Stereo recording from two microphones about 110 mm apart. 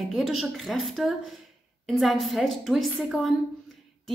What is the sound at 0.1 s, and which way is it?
A woman's voice, centre (ahead or behind).